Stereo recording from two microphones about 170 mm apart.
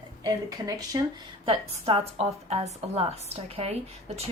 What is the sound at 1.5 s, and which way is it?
A woman's voice, 35° right (ahead or behind).